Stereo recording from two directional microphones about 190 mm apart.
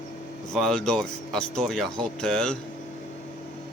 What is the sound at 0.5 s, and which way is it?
Speech, 5° left (ahead or behind).